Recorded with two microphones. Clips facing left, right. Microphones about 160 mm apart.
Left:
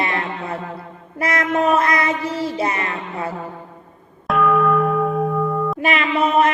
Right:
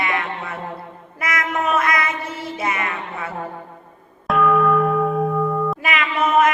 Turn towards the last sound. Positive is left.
turn(degrees=35)  # may be behind; listen again after turning